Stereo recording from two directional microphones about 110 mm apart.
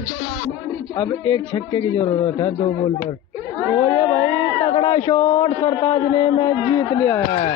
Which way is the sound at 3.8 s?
35° left (ahead or behind).